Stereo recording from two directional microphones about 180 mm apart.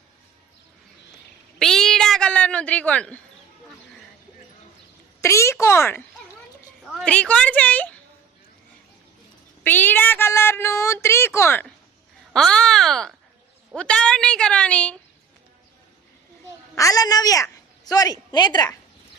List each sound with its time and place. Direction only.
1.5 s a sound: 5° left (ahead or behind)
5.2 s a woman's voice: 15° left (ahead or behind)
9.6 s speech: 10° left (ahead or behind)
16.7 s a woman's voice: 20° left (ahead or behind)